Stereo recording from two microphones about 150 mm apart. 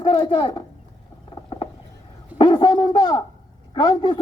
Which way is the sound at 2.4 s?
30° left (ahead or behind).